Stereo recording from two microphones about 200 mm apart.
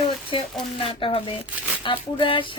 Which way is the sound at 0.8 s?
25° left (ahead or behind).